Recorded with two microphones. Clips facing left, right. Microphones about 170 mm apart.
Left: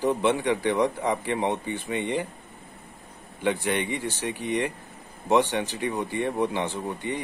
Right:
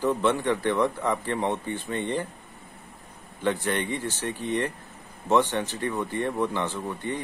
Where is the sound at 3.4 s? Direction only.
15° left (ahead or behind).